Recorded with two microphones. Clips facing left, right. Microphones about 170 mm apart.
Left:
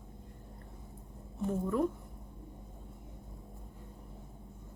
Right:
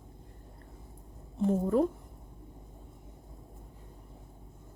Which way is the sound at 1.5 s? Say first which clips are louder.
Right 5 dB; 30° right (ahead or behind).